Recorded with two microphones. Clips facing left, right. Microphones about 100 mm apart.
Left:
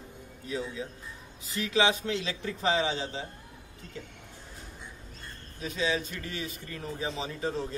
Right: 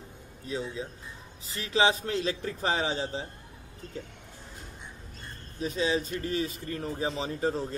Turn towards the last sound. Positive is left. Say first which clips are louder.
# right 3 dB
turn(degrees=-35)  # may be behind; listen again after turning